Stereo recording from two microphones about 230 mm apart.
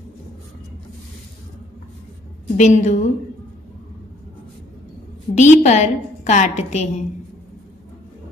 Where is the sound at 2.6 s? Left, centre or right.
Left.